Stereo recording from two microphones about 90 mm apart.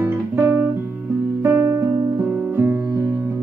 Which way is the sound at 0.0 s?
25° right (ahead or behind).